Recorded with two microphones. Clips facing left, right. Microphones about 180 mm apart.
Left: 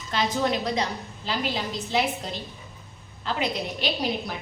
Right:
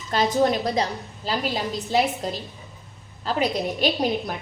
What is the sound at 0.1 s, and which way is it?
A woman's voice, 40° right (ahead or behind).